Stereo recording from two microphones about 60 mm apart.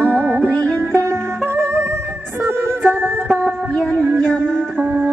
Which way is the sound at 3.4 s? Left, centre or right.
Left.